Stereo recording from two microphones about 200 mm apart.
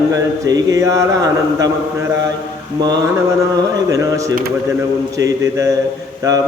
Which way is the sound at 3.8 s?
15° right (ahead or behind).